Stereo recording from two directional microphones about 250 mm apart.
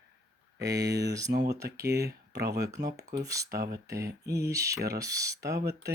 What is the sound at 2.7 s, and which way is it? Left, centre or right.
Speech, centre.